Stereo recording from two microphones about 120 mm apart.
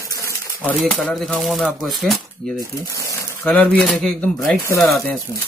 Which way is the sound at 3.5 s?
15° left (ahead or behind).